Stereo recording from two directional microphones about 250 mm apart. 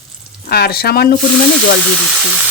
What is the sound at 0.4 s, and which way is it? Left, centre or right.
Speech, left.